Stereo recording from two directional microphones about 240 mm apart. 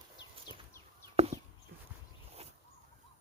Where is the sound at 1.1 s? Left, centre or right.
Right.